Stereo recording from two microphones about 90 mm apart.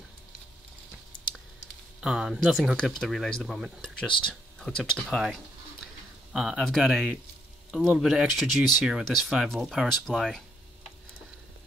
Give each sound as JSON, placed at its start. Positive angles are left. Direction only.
{"t": 2.0, "sound": "speech", "side_deg": -5}
{"t": 5.0, "sound": "speech", "side_deg": -5}